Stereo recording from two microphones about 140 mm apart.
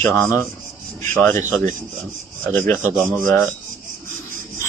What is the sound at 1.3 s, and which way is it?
Speech, 20° left (ahead or behind).